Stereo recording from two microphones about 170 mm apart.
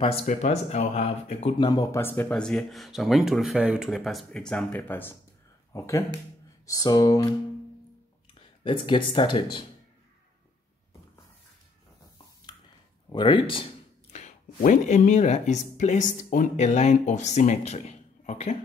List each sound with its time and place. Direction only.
0.0 s speech: 40° left (ahead or behind)
1.6 s speech: 20° left (ahead or behind)
8.4 s speech: 30° left (ahead or behind)
13.1 s speech: 25° left (ahead or behind)
14.1 s speech: 45° left (ahead or behind)